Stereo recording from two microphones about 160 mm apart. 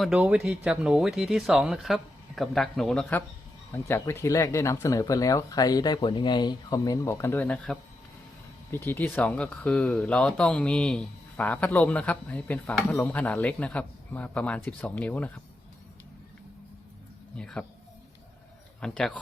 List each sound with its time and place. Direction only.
0.0 s speech: 5° right (ahead or behind); by 15.3 s 10° left (ahead or behind)
17.3 s speech: 5° left (ahead or behind)
18.8 s speech: 5° left (ahead or behind)